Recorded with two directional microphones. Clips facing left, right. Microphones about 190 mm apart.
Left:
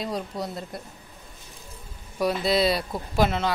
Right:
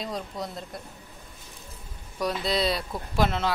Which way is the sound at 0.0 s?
5° left (ahead or behind).